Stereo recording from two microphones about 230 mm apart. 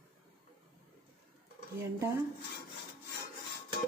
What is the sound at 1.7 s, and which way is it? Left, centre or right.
Speech, centre.